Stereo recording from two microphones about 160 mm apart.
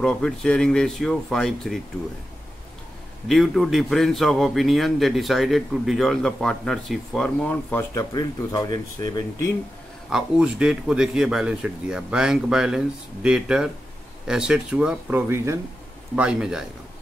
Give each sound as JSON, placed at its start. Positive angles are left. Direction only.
{"t": 0.0, "sound": "a man's voice", "side_deg": 5}
{"t": 3.3, "sound": "a man's voice", "side_deg": 0}
{"t": 7.9, "sound": "speech", "side_deg": 25}
{"t": 10.0, "sound": "a man's voice", "side_deg": -5}